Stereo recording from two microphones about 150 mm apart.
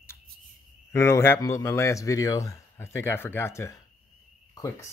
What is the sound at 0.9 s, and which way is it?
Speech, 20° left (ahead or behind).